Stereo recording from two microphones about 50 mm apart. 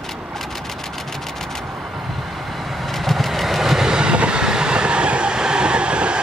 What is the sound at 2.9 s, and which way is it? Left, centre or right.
Train, centre.